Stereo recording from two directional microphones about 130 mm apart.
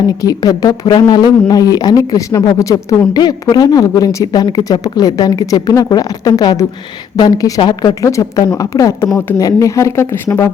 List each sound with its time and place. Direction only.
0.2 s speech: 30° left (ahead or behind)